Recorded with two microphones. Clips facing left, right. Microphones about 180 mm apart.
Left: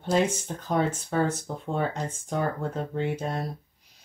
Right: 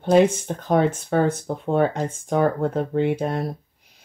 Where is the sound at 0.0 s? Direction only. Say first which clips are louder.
Right 8 dB; 60° right (ahead or behind).